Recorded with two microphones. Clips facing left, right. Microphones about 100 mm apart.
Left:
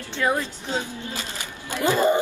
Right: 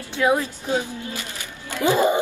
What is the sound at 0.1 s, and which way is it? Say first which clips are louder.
A woman's voice: right 4 dB; 15° right (ahead or behind).